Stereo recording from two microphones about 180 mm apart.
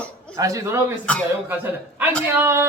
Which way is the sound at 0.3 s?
20° right (ahead or behind).